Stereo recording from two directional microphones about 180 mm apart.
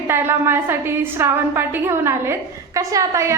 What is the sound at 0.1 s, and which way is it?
A woman's voice, 15° right (ahead or behind).